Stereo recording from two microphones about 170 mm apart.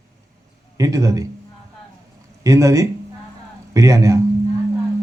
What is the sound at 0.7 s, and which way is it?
Speech, 20° right (ahead or behind).